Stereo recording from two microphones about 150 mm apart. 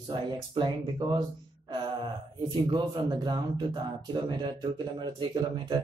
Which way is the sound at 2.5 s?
30° right (ahead or behind).